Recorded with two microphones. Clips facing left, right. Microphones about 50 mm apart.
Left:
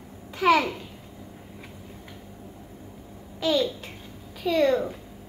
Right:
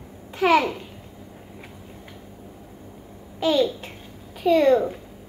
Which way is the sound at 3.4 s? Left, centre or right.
Right.